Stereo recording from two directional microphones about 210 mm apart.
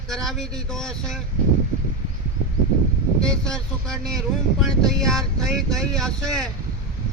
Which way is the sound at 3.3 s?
5° left (ahead or behind).